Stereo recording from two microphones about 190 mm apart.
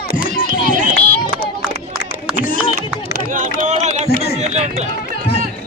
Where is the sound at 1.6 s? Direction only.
Centre (ahead or behind).